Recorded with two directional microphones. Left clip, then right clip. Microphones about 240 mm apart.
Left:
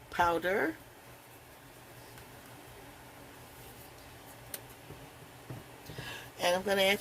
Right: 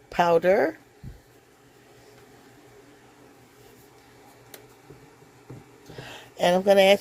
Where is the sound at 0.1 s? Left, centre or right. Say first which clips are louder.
Right 9 dB; right.